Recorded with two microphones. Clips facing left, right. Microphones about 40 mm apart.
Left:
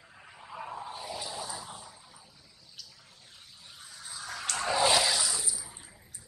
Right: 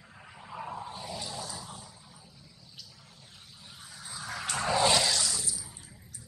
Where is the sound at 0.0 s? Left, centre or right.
Centre.